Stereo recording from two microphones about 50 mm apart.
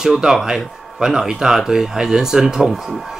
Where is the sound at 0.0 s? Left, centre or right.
Centre.